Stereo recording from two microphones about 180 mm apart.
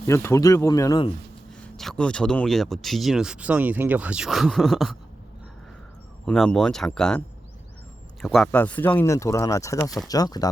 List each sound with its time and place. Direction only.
0.1 s speech: 15° left (ahead or behind)
1.5 s speech: 5° left (ahead or behind)
6.2 s speech: 5° left (ahead or behind)
8.2 s speech: centre (ahead or behind)
8.5 s speech: 10° left (ahead or behind)